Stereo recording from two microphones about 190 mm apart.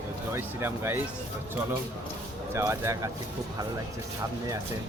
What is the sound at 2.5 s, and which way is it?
Speech, 15° right (ahead or behind).